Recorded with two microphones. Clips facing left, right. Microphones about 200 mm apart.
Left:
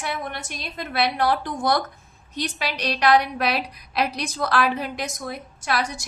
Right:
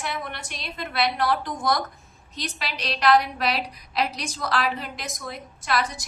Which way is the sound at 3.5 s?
55° left (ahead or behind).